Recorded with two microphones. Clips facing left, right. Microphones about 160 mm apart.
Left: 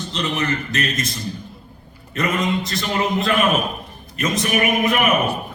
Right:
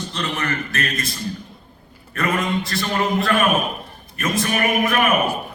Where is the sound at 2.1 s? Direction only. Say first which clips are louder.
Left 1 dB; 20° left (ahead or behind).